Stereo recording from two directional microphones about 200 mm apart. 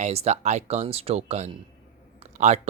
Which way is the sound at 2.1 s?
35° right (ahead or behind).